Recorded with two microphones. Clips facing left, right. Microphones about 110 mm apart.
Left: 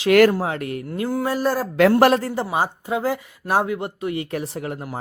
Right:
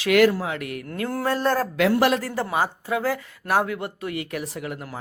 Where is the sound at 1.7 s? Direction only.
45° left (ahead or behind).